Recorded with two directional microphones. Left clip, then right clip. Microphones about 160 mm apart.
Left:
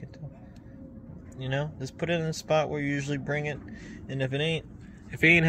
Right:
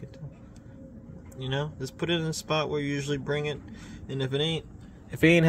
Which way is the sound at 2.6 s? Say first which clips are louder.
Right 1 dB; 25° right (ahead or behind).